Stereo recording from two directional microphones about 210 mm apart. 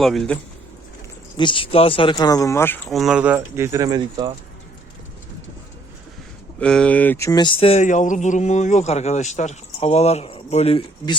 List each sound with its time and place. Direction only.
0.0 s speech: centre (ahead or behind)
1.4 s speech: 25° left (ahead or behind)
2.9 s speech: centre (ahead or behind); by 4.3 s 20° right (ahead or behind)
6.6 s speech: 5° left (ahead or behind); by 11.2 s 25° left (ahead or behind)